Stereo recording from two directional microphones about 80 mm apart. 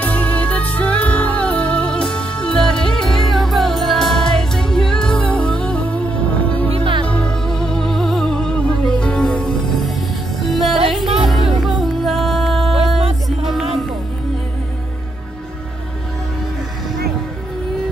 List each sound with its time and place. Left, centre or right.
0.0 s music: centre
6.8 s music: right
7.1 s music: centre